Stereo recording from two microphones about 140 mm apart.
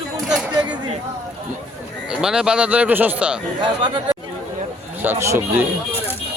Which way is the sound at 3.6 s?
35° right (ahead or behind).